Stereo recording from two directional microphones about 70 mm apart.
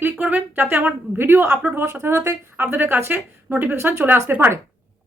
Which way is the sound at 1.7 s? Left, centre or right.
Right.